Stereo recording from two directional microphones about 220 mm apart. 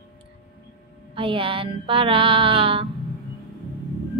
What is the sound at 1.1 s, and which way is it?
A woman's voice, 25° right (ahead or behind).